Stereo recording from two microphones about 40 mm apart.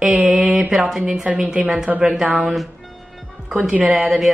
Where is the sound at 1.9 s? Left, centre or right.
Right.